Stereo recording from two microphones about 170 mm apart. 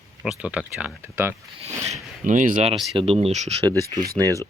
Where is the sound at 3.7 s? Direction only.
20° right (ahead or behind).